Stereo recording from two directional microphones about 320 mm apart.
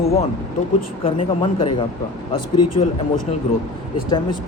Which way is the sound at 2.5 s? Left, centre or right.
Left.